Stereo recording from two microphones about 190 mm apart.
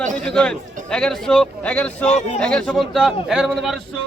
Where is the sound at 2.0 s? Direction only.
35° left (ahead or behind).